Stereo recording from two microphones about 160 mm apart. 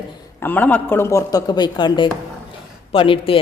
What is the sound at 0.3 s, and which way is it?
Speech, 10° left (ahead or behind).